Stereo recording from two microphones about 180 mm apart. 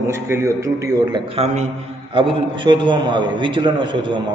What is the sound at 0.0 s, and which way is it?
A man's voice, 15° right (ahead or behind).